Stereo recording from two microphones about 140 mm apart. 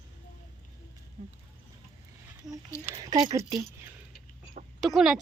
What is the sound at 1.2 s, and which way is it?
Speech, 50° right (ahead or behind).